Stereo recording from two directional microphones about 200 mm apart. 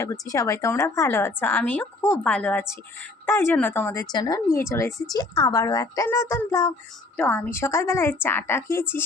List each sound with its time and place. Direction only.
0.0 s a woman's voice: 15° left (ahead or behind)